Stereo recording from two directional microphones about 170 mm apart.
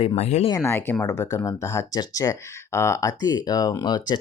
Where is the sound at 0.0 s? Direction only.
35° left (ahead or behind).